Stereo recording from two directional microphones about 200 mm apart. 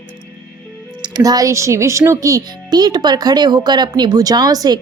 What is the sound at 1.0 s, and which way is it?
A child's voice, 20° right (ahead or behind).